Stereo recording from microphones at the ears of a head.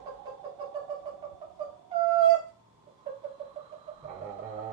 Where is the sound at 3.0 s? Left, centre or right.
Right.